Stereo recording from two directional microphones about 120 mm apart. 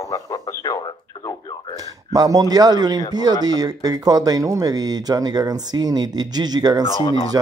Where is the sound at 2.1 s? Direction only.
30° right (ahead or behind).